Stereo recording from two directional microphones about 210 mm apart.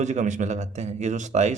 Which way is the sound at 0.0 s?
35° right (ahead or behind).